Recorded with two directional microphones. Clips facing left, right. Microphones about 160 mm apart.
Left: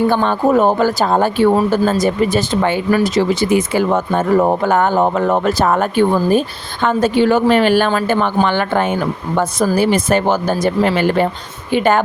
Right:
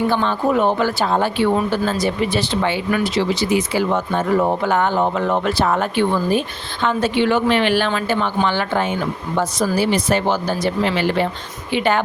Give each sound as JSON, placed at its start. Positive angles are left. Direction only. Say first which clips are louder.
{"t": 0.1, "sound": "speech", "louder": "left 4 dB", "side_deg": 50}